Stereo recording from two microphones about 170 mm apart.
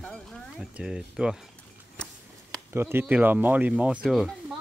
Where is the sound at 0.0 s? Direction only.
5° left (ahead or behind).